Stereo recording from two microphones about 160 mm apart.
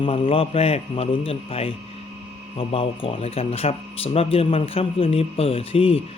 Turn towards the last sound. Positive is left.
turn(degrees=35)  # may be behind; listen again after turning